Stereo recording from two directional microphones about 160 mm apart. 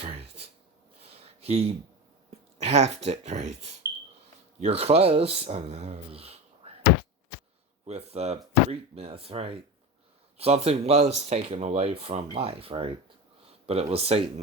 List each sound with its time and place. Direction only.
0.0 s a sound: 40° right (ahead or behind)
2.6 s speech: 40° right (ahead or behind)
4.6 s speech: 40° right (ahead or behind)
7.9 s speech: 40° right (ahead or behind)